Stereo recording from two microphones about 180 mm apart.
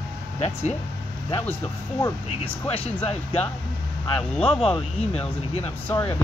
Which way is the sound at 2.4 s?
30° left (ahead or behind).